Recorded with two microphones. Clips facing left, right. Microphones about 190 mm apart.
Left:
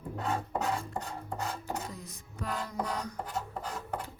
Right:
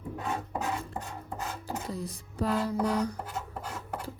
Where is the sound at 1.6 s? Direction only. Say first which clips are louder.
Right 3 dB; 35° right (ahead or behind).